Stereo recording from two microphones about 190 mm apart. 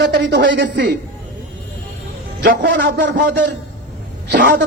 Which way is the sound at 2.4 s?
60° right (ahead or behind).